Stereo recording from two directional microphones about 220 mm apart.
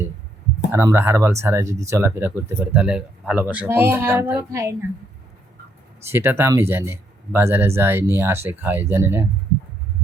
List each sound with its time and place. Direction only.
0.7 s speech: 10° right (ahead or behind)
6.1 s speech: 10° right (ahead or behind)